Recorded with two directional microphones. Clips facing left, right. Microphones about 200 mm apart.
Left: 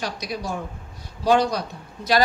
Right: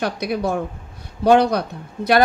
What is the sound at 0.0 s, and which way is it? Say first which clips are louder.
A woman's voice: right 8 dB; 55° right (ahead or behind).